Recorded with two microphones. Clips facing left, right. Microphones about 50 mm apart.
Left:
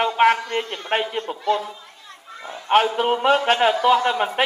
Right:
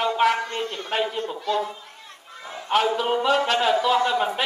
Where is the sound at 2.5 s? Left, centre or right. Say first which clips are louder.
Left 5 dB; left.